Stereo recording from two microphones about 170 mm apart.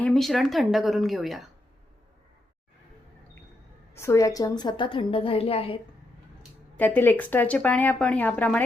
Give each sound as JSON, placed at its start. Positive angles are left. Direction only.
{"t": 0.0, "sound": "speech", "side_deg": 0}
{"t": 3.9, "sound": "a woman's voice", "side_deg": 15}
{"t": 6.7, "sound": "speech", "side_deg": 10}